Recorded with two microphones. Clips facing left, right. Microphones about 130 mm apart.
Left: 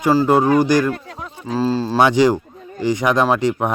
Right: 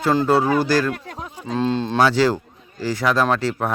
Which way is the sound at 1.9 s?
15° left (ahead or behind).